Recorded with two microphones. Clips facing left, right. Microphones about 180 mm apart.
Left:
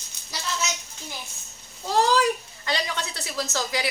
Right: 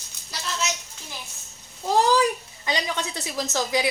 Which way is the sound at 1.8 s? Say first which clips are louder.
Right 2 dB; 15° right (ahead or behind).